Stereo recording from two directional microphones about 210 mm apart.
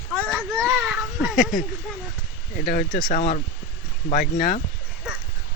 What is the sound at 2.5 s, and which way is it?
Speech, 45° left (ahead or behind).